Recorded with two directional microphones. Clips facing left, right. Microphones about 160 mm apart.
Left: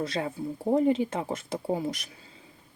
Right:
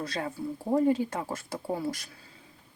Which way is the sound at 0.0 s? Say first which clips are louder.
Left 3 dB; 25° left (ahead or behind).